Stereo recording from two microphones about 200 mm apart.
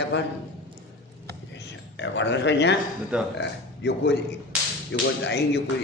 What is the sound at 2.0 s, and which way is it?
Speech, 60° left (ahead or behind).